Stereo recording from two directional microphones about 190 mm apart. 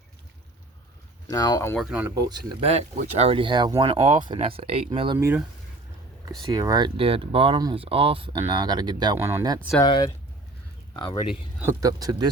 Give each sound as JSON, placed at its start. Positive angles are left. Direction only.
{"t": 1.3, "sound": "speech", "side_deg": 20}
{"t": 1.8, "sound": "speech", "side_deg": -5}
{"t": 2.1, "sound": "speech", "side_deg": -20}
{"t": 2.6, "sound": "speech", "side_deg": -35}
{"t": 5.1, "sound": "speech", "side_deg": -10}
{"t": 6.5, "sound": "speech", "side_deg": -20}
{"t": 9.8, "sound": "speech", "side_deg": 20}
{"t": 11.6, "sound": "speech", "side_deg": -20}